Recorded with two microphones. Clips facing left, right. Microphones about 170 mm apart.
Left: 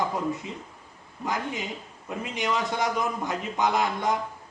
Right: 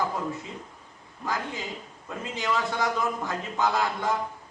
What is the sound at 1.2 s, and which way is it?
A man's voice, 20° left (ahead or behind).